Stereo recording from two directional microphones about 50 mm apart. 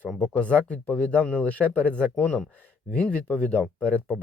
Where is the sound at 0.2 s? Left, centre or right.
Left.